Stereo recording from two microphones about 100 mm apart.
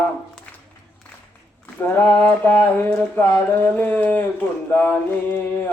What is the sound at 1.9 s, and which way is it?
Mantra, 15° left (ahead or behind).